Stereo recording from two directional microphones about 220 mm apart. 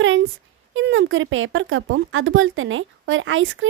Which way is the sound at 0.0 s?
60° right (ahead or behind).